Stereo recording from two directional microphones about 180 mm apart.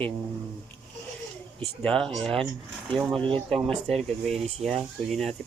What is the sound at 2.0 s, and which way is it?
Speech, 5° left (ahead or behind).